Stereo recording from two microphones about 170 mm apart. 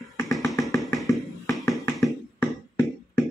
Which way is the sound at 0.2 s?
15° left (ahead or behind).